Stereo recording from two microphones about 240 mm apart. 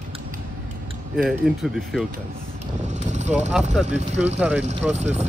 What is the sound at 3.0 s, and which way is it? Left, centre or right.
Vehicle, right.